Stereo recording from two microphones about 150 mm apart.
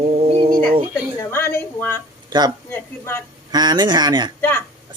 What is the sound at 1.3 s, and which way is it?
Speech, 15° left (ahead or behind).